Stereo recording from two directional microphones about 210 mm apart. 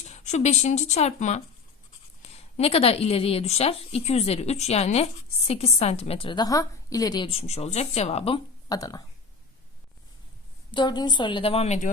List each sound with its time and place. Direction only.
0.1 s a woman's voice: 35° left (ahead or behind); by 9.0 s 15° left (ahead or behind)
10.7 s a woman's voice: 20° left (ahead or behind)